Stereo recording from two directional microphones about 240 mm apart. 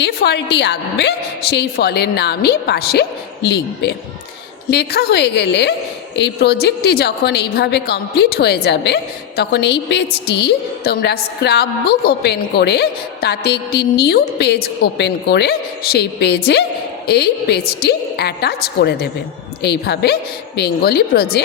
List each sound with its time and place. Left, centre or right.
0.0 s a woman's voice: left